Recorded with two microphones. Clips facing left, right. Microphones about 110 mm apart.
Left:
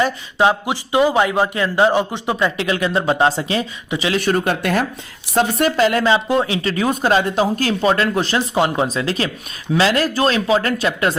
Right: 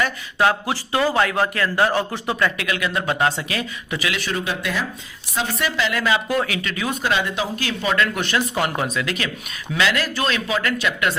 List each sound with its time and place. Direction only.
0.0 s speech: 25° left (ahead or behind)
4.2 s speech: 50° left (ahead or behind)